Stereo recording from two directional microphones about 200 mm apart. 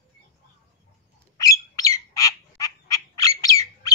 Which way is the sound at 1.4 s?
15° left (ahead or behind).